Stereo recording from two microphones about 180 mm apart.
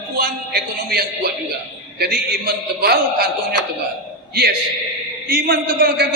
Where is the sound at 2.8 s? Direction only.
60° right (ahead or behind).